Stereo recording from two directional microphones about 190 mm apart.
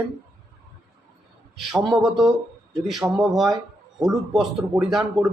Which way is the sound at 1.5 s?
Centre (ahead or behind).